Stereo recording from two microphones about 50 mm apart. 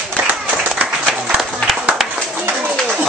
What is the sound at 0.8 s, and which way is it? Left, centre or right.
Applause, right.